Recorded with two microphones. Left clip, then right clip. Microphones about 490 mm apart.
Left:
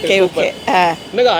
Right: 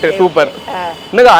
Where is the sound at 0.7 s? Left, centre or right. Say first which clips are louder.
Left 7 dB; left.